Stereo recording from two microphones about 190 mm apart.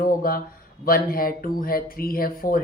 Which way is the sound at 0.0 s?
50° left (ahead or behind).